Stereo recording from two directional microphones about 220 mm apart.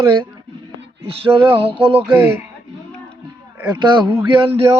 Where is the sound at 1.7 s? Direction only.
25° right (ahead or behind).